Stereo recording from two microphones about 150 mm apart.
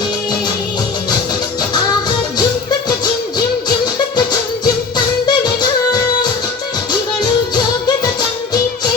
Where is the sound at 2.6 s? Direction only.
30° left (ahead or behind).